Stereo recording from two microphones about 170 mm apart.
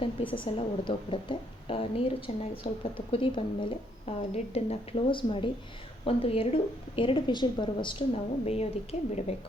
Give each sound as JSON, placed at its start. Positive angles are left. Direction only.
{"t": 0.0, "sound": "a woman's voice", "side_deg": 30}